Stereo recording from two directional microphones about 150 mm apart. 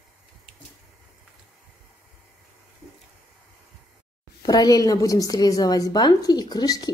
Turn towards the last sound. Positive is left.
turn(degrees=25)  # may be behind; listen again after turning